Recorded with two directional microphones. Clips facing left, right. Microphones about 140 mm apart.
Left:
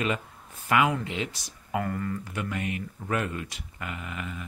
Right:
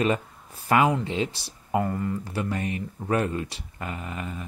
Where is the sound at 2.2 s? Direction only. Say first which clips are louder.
Right 3 dB; 35° right (ahead or behind).